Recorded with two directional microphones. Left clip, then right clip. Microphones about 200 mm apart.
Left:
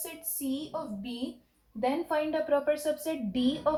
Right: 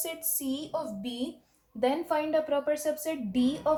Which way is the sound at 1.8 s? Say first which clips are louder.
Right 1 dB; 35° right (ahead or behind).